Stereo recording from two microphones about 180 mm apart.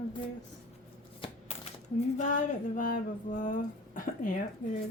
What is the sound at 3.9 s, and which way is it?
Speech, 50° left (ahead or behind).